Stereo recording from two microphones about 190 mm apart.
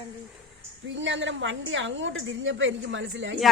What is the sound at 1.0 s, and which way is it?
A woman's voice, 75° right (ahead or behind).